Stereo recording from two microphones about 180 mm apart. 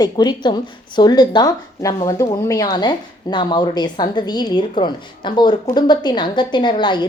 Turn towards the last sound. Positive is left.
turn(degrees=25)  # may be behind; listen again after turning